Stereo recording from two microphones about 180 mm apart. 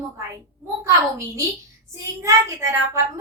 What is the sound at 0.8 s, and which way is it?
A woman's voice, 15° right (ahead or behind).